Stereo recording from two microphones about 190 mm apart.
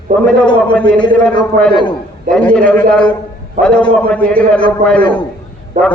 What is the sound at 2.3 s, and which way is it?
A man's voice, 5° left (ahead or behind).